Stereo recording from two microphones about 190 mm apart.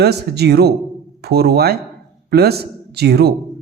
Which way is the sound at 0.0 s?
60° right (ahead or behind).